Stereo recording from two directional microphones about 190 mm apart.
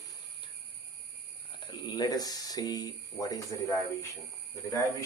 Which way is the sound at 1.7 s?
20° left (ahead or behind).